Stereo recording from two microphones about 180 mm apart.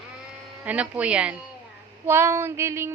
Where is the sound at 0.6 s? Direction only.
10° right (ahead or behind).